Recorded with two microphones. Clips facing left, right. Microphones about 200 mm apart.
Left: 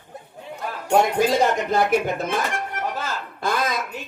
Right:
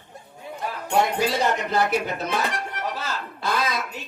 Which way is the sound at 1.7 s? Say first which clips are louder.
Left 3 dB; 50° left (ahead or behind).